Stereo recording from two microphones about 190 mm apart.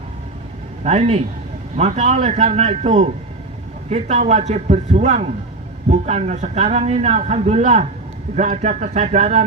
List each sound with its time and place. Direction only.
0.9 s a man's voice: 35° right (ahead or behind)